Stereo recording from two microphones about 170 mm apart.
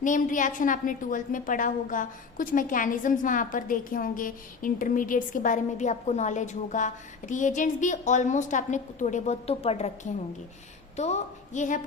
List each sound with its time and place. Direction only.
0.0 s a woman's voice: 50° left (ahead or behind)